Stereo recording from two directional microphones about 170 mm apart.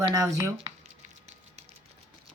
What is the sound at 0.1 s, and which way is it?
Speech, 20° right (ahead or behind).